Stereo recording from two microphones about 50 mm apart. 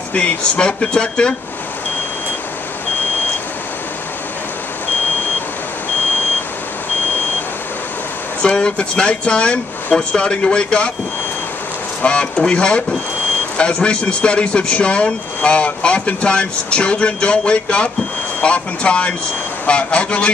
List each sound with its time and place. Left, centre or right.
0.1 s speech: left
8.4 s speech: left
12.0 s speech: left